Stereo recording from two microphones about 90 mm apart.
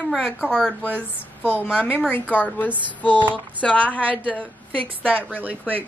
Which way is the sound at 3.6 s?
5° left (ahead or behind).